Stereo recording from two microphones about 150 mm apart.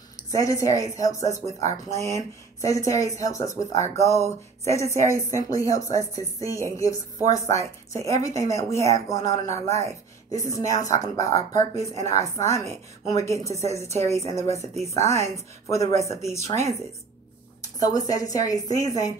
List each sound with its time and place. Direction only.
0.3 s speech: 20° left (ahead or behind)
1.3 s speech: 50° right (ahead or behind)
2.0 s speech: 20° left (ahead or behind)